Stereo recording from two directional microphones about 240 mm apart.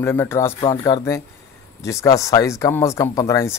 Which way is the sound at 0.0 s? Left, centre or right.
Centre.